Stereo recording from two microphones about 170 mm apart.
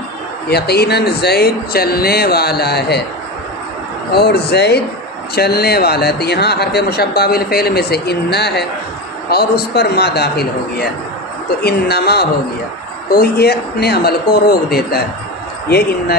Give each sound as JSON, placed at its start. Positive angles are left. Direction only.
{"t": 0.5, "sound": "speech", "side_deg": 70}
{"t": 4.1, "sound": "a man's voice", "side_deg": 70}